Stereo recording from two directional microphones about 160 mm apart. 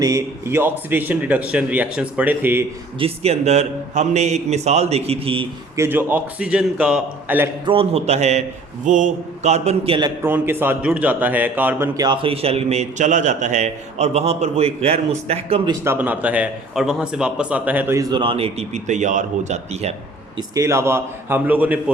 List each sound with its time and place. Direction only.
0.0 s a man's voice: 20° right (ahead or behind)
3.0 s a man's voice: 40° right (ahead or behind)
5.7 s a man's voice: 15° right (ahead or behind)
7.6 s a man's voice: 35° right (ahead or behind)
10.2 s a man's voice: 10° right (ahead or behind)
11.9 s a man's voice: 30° right (ahead or behind)
15.7 s a man's voice: 15° right (ahead or behind); by 19.9 s 45° right (ahead or behind)
20.6 s a man's voice: 20° right (ahead or behind)